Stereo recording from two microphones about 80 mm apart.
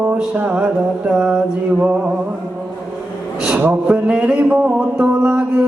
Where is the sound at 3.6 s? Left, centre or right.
Right.